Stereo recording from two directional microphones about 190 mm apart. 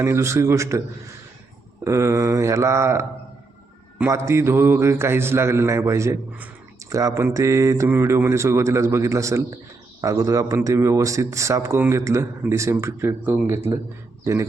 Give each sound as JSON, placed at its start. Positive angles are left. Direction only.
{"t": 0.0, "sound": "speech", "side_deg": -15}
{"t": 1.8, "sound": "speech", "side_deg": -15}